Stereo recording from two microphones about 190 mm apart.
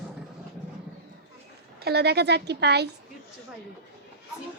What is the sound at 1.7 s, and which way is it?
A woman's voice, 60° right (ahead or behind).